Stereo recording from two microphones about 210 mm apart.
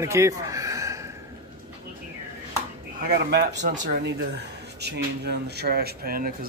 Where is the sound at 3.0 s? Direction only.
50° right (ahead or behind).